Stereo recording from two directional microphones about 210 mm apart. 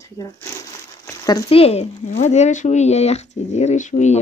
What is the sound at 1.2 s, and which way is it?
Speech, 25° left (ahead or behind).